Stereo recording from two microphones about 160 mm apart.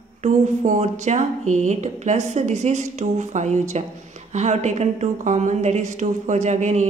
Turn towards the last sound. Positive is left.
turn(degrees=-45)  # may be behind; listen again after turning